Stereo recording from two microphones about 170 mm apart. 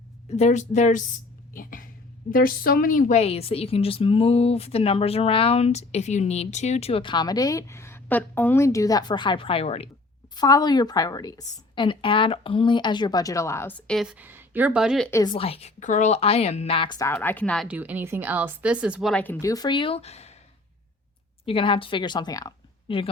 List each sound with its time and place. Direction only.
0.3 s a woman's voice: 40° left (ahead or behind)
1.5 s a sound: 55° left (ahead or behind)
2.3 s a woman's voice: 60° left (ahead or behind); by 9.9 s 35° left (ahead or behind)
10.3 s speech: 25° left (ahead or behind); by 15.1 s centre (ahead or behind)
15.4 s a woman's voice: 35° left (ahead or behind)
17.1 s speech: 10° left (ahead or behind)
17.7 s speech: 10° right (ahead or behind)
19.1 s speech: 10° left (ahead or behind); by 20.3 s 40° left (ahead or behind)
21.4 s a woman's voice: 30° left (ahead or behind)